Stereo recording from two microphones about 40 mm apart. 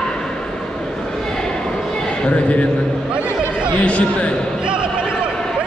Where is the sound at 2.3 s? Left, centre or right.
Left.